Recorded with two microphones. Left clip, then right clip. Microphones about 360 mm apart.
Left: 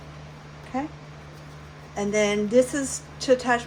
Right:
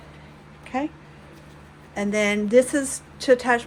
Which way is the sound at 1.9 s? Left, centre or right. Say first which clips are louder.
Even; right.